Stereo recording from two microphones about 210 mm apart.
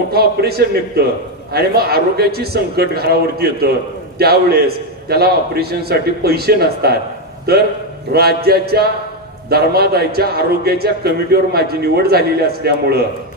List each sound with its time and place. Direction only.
0.1 s a man's voice: 50° right (ahead or behind)